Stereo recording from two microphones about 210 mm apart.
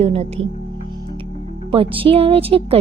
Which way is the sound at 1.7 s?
25° right (ahead or behind).